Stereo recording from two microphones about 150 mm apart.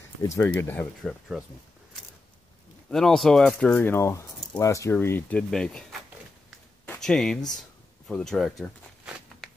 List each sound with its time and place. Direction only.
0.4 s speech: 15° left (ahead or behind)
1.3 s speech: centre (ahead or behind)
2.9 s speech: centre (ahead or behind)
8.1 s a sound: centre (ahead or behind)